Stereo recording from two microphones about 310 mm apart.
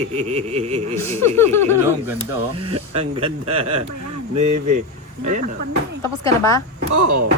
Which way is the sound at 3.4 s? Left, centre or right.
Right.